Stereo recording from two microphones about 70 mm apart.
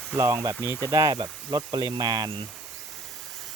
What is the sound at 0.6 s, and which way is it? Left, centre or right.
Speech, right.